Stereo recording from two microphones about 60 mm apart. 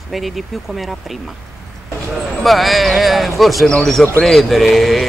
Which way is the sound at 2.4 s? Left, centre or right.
Centre.